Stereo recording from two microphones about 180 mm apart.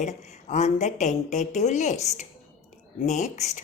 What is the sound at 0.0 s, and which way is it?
Speech, 40° left (ahead or behind).